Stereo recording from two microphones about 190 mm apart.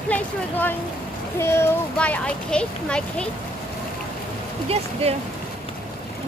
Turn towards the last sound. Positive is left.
turn(degrees=-30)  # may be behind; listen again after turning